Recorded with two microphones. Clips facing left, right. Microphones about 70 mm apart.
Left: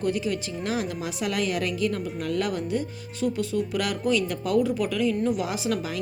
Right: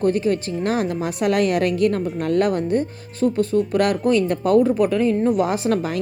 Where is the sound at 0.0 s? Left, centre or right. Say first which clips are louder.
Right 7 dB; right.